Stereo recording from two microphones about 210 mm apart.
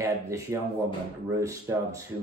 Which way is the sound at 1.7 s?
10° right (ahead or behind).